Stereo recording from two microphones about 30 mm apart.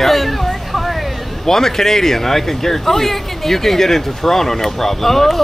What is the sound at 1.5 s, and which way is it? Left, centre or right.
Speech, centre.